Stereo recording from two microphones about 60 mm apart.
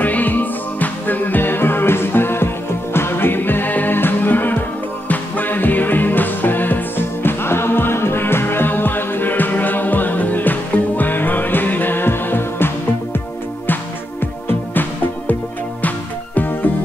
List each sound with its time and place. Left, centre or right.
0.0 s music: left
14.5 s music: left